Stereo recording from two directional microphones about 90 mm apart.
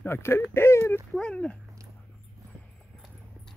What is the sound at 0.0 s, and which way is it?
Speech, 25° left (ahead or behind).